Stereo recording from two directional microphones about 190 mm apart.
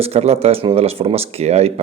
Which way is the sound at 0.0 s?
35° right (ahead or behind).